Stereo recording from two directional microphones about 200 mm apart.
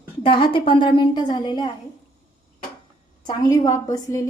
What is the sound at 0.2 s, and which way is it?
A woman's voice, 25° left (ahead or behind).